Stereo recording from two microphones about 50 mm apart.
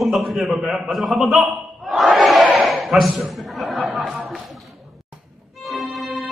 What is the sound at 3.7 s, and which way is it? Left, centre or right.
Chatter, centre.